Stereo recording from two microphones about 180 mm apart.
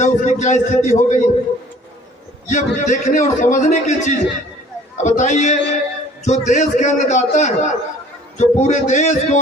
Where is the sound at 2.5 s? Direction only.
45° left (ahead or behind).